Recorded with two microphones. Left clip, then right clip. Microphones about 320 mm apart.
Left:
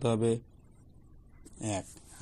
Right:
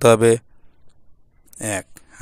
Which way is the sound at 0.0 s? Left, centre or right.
Right.